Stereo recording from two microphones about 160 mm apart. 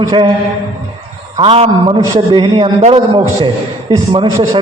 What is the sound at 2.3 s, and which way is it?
A man's voice, 30° right (ahead or behind).